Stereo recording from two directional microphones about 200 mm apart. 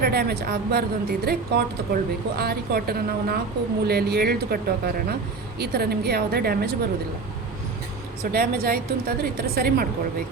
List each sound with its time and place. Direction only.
0.0 s a woman's voice: 50° right (ahead or behind)
8.2 s a woman's voice: 50° right (ahead or behind)